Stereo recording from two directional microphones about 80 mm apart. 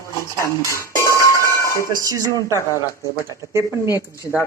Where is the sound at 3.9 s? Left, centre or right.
Left.